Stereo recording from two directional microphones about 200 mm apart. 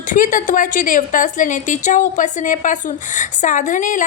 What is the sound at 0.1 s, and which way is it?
A woman's voice, 40° left (ahead or behind).